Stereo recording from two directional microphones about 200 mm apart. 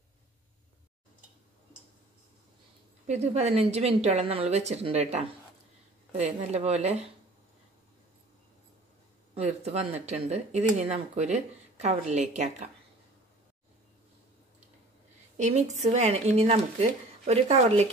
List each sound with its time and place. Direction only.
3.1 s speech: 35° right (ahead or behind)
9.3 s speech: 30° right (ahead or behind)
15.3 s speech: 35° right (ahead or behind)